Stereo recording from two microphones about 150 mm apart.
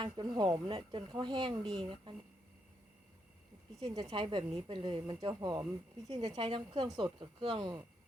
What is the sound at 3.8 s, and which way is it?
A woman's voice, 30° right (ahead or behind).